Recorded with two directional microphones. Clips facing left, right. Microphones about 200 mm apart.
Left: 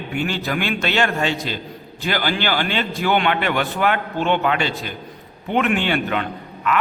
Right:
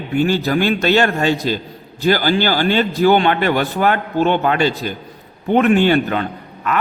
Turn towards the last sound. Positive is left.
turn(degrees=-40)  # may be behind; listen again after turning